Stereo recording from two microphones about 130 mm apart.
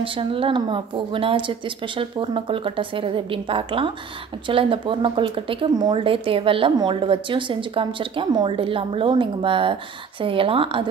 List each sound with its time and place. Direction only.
0.0 s speech: 40° right (ahead or behind)